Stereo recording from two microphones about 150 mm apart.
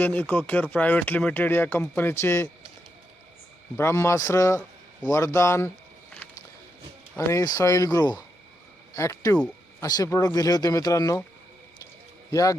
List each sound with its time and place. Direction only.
0.0 s speech: 10° left (ahead or behind)
3.8 s speech: 15° left (ahead or behind)
7.2 s speech: 20° left (ahead or behind)
12.3 s speech: 20° left (ahead or behind)